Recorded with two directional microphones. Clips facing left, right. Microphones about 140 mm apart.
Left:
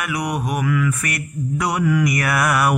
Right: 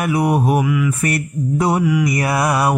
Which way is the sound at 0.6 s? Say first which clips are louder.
Right 2 dB; 15° right (ahead or behind).